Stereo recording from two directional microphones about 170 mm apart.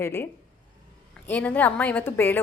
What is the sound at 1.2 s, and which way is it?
A woman's voice, 10° left (ahead or behind).